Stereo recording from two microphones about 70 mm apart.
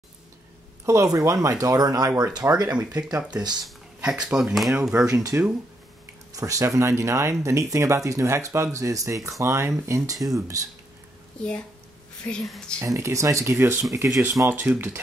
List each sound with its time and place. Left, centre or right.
0.8 s speech: right
3.2 s speech: centre
5.0 s speech: right
12.2 s a woman's voice: left
12.8 s speech: right
14.7 s speech: right